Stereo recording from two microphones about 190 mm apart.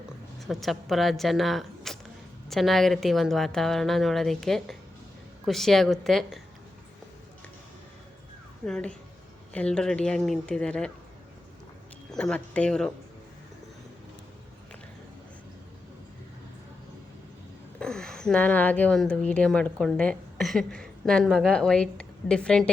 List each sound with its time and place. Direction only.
0.3 s speech: centre (ahead or behind)
8.6 s speech: 5° left (ahead or behind)
12.1 s speech: 5° left (ahead or behind)
17.7 s speech: 5° left (ahead or behind)